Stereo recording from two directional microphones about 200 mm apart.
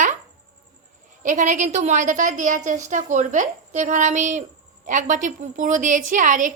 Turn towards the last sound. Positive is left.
turn(degrees=-40)  # may be behind; listen again after turning